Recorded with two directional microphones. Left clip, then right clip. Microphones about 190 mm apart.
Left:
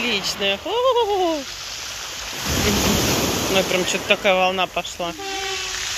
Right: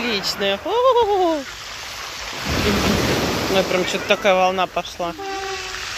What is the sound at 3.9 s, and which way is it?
Speech, 10° right (ahead or behind).